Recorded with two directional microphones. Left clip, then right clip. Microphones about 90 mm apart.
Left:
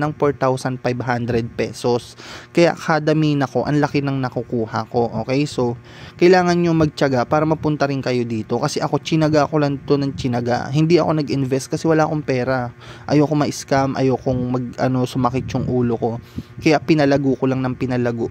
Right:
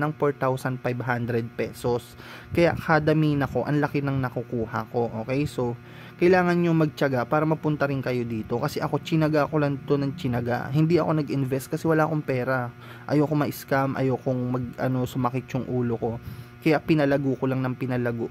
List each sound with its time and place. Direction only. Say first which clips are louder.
0.0 s speech: left 6 dB; 35° left (ahead or behind)
6.6 s speech: left 6 dB; 35° left (ahead or behind)
7.4 s speech: left 6 dB; 35° left (ahead or behind)
14.5 s speech: left 7 dB; 45° left (ahead or behind)
16.6 s speech: left 6 dB; 50° left (ahead or behind)
17.2 s a man's voice: left 7 dB; 30° left (ahead or behind)
17.5 s speech: left 6 dB; 45° left (ahead or behind)